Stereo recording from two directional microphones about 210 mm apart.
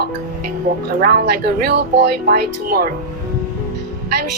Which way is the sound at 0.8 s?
50° right (ahead or behind).